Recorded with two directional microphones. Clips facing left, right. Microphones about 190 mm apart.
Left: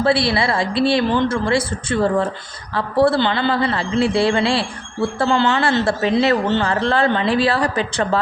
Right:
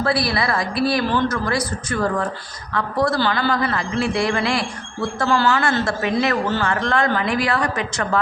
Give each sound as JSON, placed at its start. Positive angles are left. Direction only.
{"t": 0.0, "sound": "a man's voice", "side_deg": 25}